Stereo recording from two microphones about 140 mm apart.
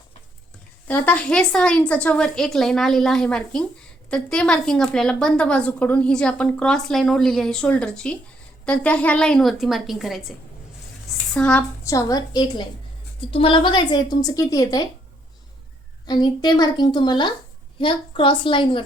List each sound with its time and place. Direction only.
0.9 s a woman's voice: 10° left (ahead or behind)
11.3 s a woman's voice: 5° left (ahead or behind)
11.8 s a woman's voice: 20° left (ahead or behind)
13.3 s a woman's voice: 40° left (ahead or behind)
16.0 s a woman's voice: 30° left (ahead or behind)